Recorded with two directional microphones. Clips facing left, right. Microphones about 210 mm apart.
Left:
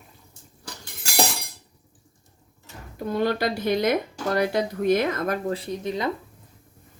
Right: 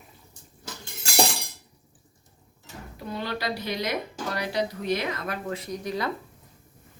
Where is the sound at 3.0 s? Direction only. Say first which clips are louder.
Left 8 dB; 50° left (ahead or behind); by 6.1 s 20° left (ahead or behind).